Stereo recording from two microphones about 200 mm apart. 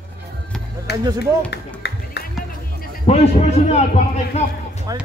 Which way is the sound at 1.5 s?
55° left (ahead or behind).